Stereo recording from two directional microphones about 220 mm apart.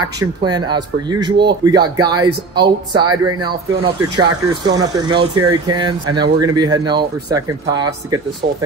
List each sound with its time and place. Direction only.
0.0 s speech: 20° right (ahead or behind)